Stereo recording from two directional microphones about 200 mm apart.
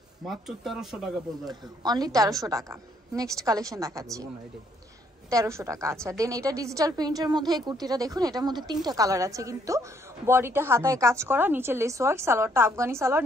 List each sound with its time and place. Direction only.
0.2 s speech: centre (ahead or behind)
1.5 s a woman's voice: 20° right (ahead or behind)
5.3 s a woman's voice: 15° right (ahead or behind)